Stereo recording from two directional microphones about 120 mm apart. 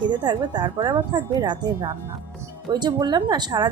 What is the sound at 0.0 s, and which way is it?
A woman's voice, 40° right (ahead or behind).